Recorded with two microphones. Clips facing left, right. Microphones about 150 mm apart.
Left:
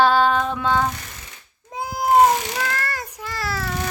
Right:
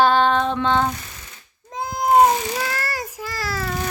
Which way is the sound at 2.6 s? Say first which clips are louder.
Even; 5° right (ahead or behind).